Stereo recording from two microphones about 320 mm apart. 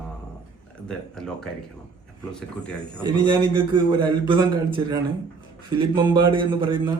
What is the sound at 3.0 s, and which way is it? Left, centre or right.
A man's voice, centre.